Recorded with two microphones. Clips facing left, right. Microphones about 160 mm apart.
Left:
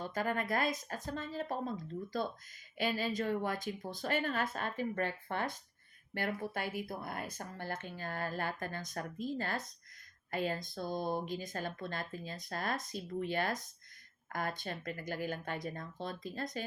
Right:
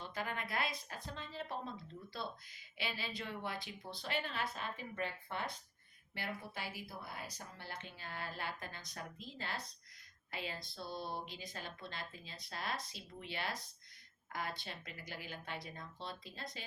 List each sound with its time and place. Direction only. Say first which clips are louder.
0.0 s speech: left 7 dB; 45° left (ahead or behind)